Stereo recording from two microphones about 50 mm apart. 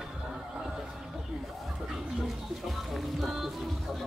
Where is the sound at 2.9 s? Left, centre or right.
Centre.